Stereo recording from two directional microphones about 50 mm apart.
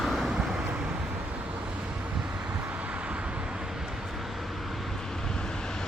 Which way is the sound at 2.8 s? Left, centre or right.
Right.